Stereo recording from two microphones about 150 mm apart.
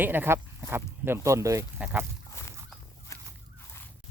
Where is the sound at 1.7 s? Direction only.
10° right (ahead or behind).